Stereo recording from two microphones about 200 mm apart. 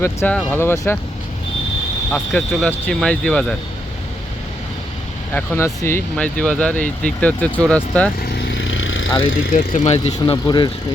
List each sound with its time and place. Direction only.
0.0 s speech: 10° left (ahead or behind)
2.1 s speech: centre (ahead or behind)
5.3 s speech: 15° left (ahead or behind)
8.2 s vehicle: 65° left (ahead or behind)
9.5 s speech: 40° left (ahead or behind)
10.2 s speech: 20° left (ahead or behind)